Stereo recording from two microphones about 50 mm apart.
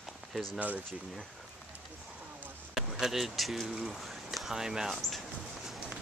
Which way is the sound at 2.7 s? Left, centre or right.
Centre.